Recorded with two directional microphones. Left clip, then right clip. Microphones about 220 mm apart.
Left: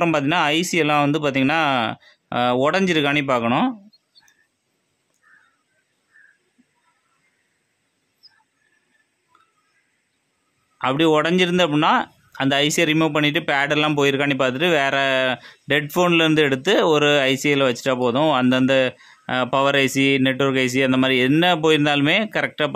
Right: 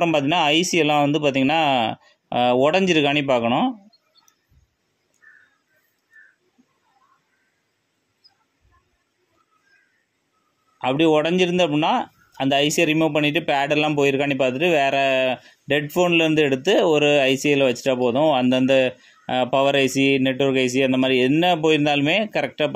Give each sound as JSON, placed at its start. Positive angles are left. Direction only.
{"t": 0.0, "sound": "speech", "side_deg": 15}
{"t": 10.8, "sound": "speech", "side_deg": 20}